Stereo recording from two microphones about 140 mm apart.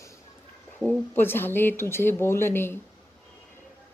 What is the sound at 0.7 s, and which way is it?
Speech, 10° left (ahead or behind).